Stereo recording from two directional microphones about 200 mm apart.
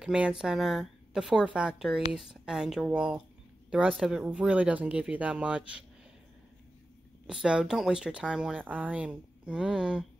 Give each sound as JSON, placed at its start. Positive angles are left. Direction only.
{"t": 0.0, "sound": "speech", "side_deg": -5}
{"t": 7.2, "sound": "speech", "side_deg": -5}